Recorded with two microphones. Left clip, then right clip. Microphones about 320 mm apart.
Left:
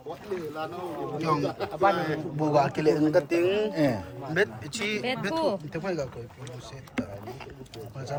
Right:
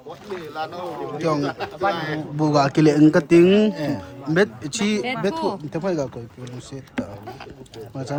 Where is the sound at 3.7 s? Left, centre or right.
Left.